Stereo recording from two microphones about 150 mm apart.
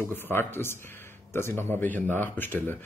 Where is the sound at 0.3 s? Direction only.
15° left (ahead or behind).